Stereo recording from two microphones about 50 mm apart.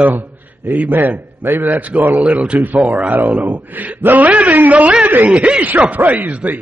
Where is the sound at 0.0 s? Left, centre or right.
Right.